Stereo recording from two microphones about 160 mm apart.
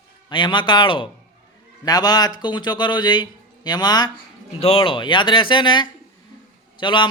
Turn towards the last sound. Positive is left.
turn(degrees=30)  # may be behind; listen again after turning